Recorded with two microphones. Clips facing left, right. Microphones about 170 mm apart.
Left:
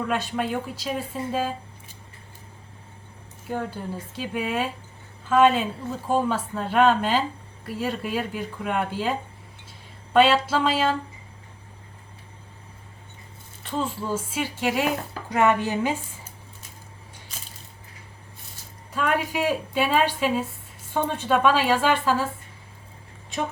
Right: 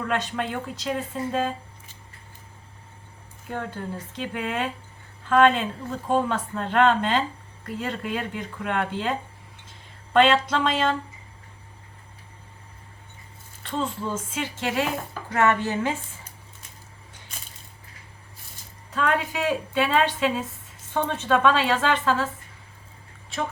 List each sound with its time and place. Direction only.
0.0 s a woman's voice: 10° left (ahead or behind)
3.5 s a woman's voice: 10° left (ahead or behind)
13.6 s a woman's voice: 10° left (ahead or behind)
18.9 s a woman's voice: 10° left (ahead or behind)
23.3 s a woman's voice: 20° left (ahead or behind)